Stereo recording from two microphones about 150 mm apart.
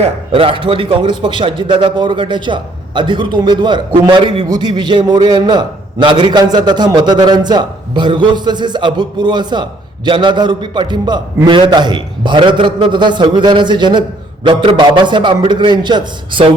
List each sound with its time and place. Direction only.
0.0 s a man's voice: 35° right (ahead or behind)